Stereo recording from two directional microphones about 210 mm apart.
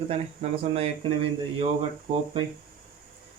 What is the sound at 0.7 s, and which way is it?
Speech, 25° right (ahead or behind).